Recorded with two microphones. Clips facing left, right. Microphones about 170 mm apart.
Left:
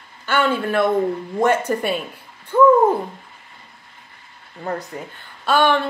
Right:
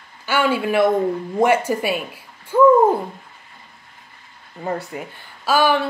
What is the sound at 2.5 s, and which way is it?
Owl, 10° right (ahead or behind).